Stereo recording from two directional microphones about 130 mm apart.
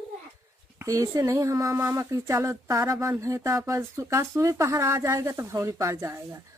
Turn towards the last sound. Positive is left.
turn(degrees=-25)  # may be behind; listen again after turning